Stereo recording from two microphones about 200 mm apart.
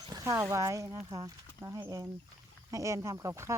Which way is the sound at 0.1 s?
15° right (ahead or behind).